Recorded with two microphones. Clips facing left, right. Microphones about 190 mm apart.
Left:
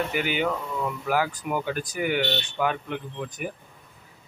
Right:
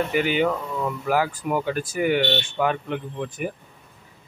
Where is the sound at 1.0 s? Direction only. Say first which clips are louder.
Right 3 dB; 5° right (ahead or behind).